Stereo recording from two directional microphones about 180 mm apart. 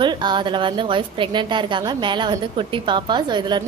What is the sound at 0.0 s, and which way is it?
A woman's voice, 25° right (ahead or behind).